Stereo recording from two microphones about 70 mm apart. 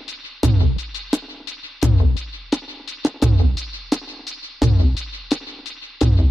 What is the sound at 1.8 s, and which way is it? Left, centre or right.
Music, centre.